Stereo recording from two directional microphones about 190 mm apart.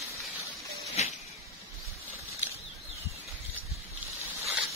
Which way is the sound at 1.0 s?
35° left (ahead or behind).